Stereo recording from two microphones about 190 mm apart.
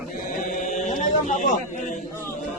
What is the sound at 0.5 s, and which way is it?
Mantra, 40° left (ahead or behind).